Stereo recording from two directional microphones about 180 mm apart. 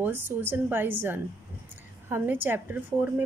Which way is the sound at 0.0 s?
10° right (ahead or behind).